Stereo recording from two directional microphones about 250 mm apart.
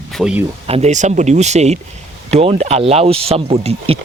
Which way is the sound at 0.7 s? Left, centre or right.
Right.